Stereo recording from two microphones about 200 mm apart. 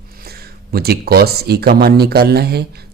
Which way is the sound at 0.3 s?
50° right (ahead or behind).